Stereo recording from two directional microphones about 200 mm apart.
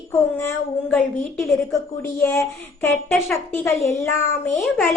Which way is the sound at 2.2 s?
15° left (ahead or behind).